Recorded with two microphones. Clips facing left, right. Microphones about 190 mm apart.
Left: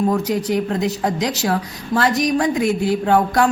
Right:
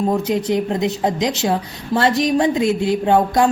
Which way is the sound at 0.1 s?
25° right (ahead or behind).